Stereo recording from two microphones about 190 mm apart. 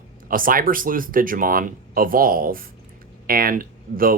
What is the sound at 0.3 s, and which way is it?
Speech, 45° right (ahead or behind).